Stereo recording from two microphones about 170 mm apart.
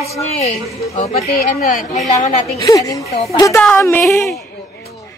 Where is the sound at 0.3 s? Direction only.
40° left (ahead or behind).